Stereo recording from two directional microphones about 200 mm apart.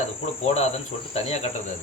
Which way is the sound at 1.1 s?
35° left (ahead or behind).